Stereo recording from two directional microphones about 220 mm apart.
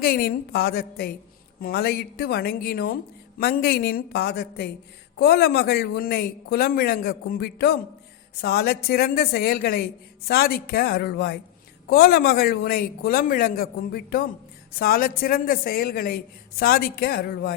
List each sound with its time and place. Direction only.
0.0 s speech: 40° left (ahead or behind)